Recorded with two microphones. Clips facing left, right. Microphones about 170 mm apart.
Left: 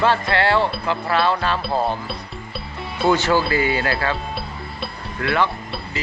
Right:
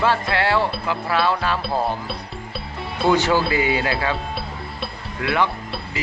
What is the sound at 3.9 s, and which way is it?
Speech, 5° right (ahead or behind).